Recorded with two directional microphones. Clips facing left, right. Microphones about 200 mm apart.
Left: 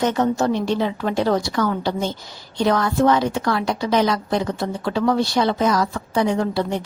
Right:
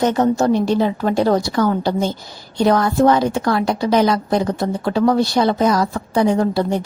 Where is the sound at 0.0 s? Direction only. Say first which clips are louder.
Right 3 dB; 40° right (ahead or behind).